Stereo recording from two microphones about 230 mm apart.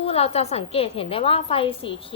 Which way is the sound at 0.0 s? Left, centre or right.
Left.